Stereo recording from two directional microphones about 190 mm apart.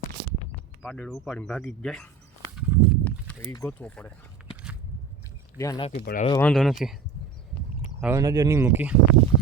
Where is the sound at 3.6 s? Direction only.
5° left (ahead or behind).